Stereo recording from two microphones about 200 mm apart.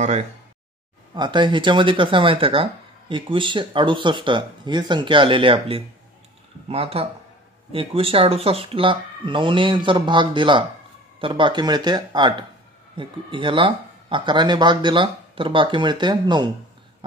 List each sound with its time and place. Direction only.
1.1 s speech: 20° right (ahead or behind)